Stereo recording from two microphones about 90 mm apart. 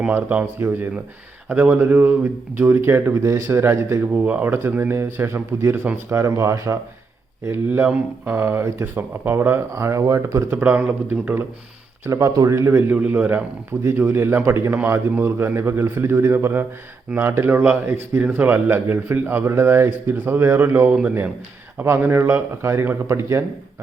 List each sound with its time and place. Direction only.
0.2 s a man's voice: 20° right (ahead or behind)
4.0 s a man's voice: 15° right (ahead or behind); by 6.7 s 35° right (ahead or behind)
7.9 s a man's voice: 20° right (ahead or behind)
10.6 s speech: 15° right (ahead or behind)
12.0 s speech: 35° right (ahead or behind)
12.9 s a man's voice: 15° right (ahead or behind)